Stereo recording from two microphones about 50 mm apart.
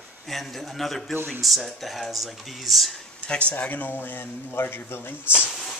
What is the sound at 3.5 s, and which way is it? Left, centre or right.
A man's voice, left.